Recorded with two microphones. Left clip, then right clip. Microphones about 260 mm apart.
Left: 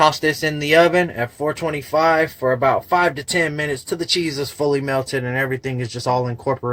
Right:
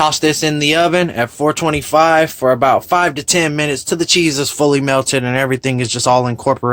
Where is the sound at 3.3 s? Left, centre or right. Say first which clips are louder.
Right 5 dB; right.